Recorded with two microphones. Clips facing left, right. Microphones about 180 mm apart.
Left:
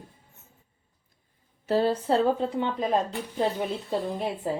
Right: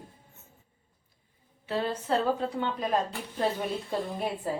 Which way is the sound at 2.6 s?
25° left (ahead or behind).